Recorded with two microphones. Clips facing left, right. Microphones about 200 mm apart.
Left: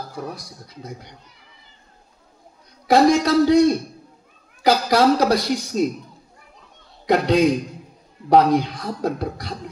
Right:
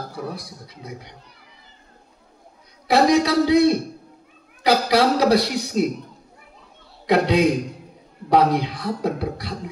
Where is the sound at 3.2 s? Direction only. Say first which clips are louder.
Left 2 dB; 45° left (ahead or behind).